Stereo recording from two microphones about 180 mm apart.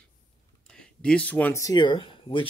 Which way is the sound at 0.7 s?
5° left (ahead or behind).